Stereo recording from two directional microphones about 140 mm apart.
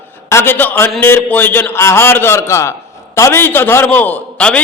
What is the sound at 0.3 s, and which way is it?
A man's voice, 15° left (ahead or behind).